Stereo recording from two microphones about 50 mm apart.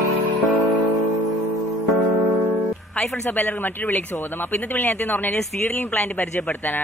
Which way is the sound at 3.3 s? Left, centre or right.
Left.